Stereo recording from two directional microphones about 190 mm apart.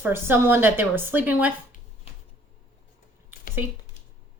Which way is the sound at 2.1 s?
30° left (ahead or behind).